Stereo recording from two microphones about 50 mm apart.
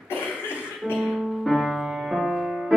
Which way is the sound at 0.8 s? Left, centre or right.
Right.